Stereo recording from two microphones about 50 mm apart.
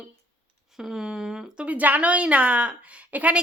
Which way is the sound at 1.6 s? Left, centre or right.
Right.